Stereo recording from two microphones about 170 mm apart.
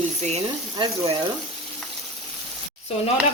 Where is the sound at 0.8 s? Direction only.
30° right (ahead or behind).